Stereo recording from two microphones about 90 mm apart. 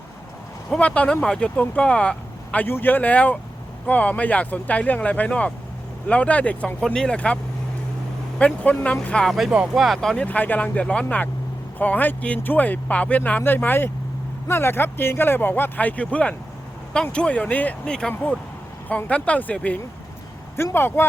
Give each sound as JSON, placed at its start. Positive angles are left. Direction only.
{"t": 0.7, "sound": "speech", "side_deg": 15}
{"t": 2.6, "sound": "speech", "side_deg": 25}
{"t": 8.4, "sound": "speech", "side_deg": 15}
{"t": 9.3, "sound": "speech", "side_deg": -5}
{"t": 10.2, "sound": "speech", "side_deg": 20}